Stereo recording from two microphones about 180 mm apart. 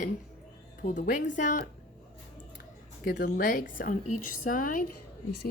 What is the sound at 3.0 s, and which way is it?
A woman's voice, 55° left (ahead or behind).